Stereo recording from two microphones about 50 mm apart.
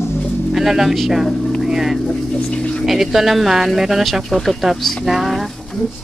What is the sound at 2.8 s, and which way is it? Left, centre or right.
Speech, centre.